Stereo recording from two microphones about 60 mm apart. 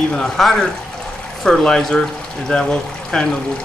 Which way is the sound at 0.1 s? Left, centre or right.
Centre.